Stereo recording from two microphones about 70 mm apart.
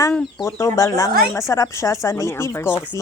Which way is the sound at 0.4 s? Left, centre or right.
Left.